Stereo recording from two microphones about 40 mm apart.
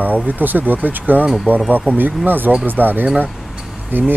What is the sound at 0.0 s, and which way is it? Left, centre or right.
Speech, right.